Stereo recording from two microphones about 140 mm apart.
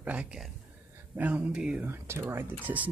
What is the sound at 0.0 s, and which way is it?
Speech, 10° right (ahead or behind).